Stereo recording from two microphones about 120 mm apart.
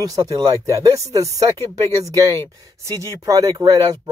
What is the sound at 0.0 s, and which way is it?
Speech, 30° right (ahead or behind).